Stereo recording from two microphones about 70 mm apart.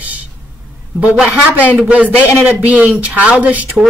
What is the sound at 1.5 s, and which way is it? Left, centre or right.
Speech, right.